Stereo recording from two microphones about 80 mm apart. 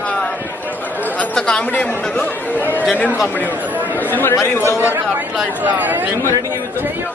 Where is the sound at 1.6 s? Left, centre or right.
Left.